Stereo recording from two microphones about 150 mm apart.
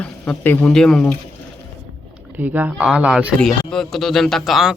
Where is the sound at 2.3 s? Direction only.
10° right (ahead or behind).